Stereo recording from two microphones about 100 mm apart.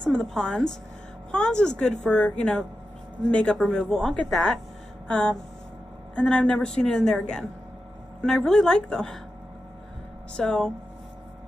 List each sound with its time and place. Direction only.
0.0 s a woman's voice: 5° left (ahead or behind)
5.0 s a sound: 10° left (ahead or behind)
6.1 s a woman's voice: 10° left (ahead or behind)
10.3 s a woman's voice: 5° left (ahead or behind)